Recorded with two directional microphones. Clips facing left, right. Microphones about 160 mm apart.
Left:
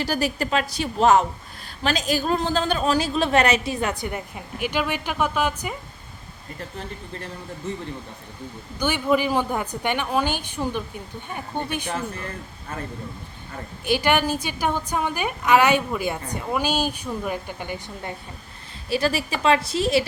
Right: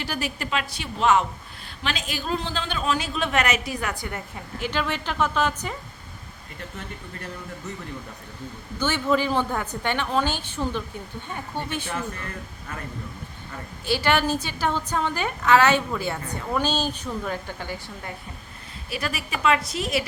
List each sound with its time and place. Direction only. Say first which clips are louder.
0.0 s a woman's voice: left 6 dB; 40° left (ahead or behind); by 5.7 s 10° left (ahead or behind)
6.7 s a woman's voice: left 3 dB; 30° left (ahead or behind)
8.8 s a woman's voice: left 2 dB; 15° left (ahead or behind)
13.8 s a woman's voice: left 2 dB; 15° left (ahead or behind)
18.9 s a woman's voice: left 7 dB; 30° left (ahead or behind)